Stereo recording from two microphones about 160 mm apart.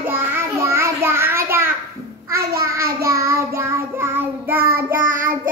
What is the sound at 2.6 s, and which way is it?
Child singing, 20° right (ahead or behind).